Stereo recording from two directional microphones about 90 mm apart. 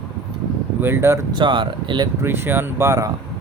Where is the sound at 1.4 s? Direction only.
65° right (ahead or behind).